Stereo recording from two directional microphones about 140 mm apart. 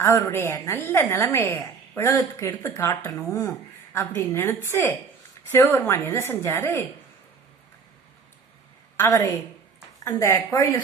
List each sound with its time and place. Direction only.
0.2 s a woman's voice: 20° left (ahead or behind)
9.0 s speech: 20° left (ahead or behind)